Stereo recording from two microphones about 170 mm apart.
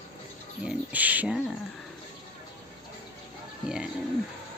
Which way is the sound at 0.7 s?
10° right (ahead or behind).